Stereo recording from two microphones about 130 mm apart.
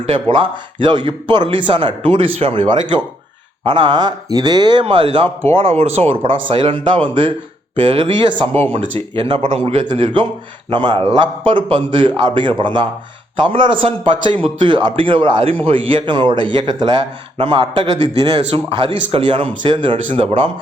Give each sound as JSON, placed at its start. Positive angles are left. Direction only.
{"t": 0.0, "sound": "a man's voice", "side_deg": -40}